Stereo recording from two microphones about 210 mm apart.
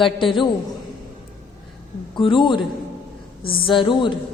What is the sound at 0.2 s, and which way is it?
Speech, 25° left (ahead or behind).